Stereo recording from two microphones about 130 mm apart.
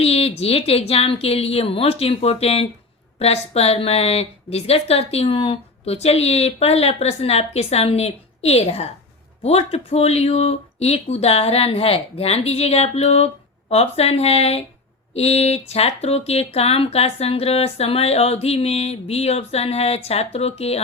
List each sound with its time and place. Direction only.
0.0 s a woman's voice: 50° left (ahead or behind)